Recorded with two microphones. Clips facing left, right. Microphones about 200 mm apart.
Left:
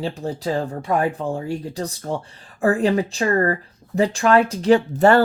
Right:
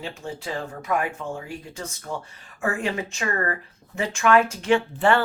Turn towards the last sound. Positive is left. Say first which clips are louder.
# left 6 dB
turn(degrees=40)  # may be behind; listen again after turning